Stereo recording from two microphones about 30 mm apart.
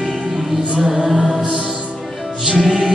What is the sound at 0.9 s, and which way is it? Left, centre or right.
Music, centre.